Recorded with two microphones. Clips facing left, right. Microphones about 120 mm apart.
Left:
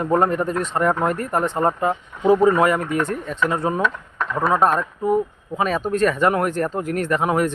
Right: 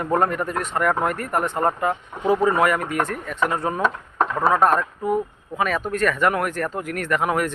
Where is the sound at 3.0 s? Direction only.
25° left (ahead or behind).